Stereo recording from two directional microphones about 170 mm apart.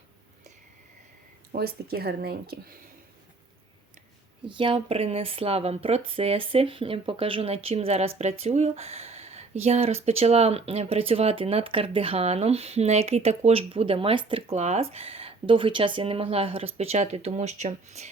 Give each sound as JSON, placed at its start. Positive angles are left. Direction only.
{"t": 1.5, "sound": "speech", "side_deg": -65}
{"t": 4.4, "sound": "speech", "side_deg": -30}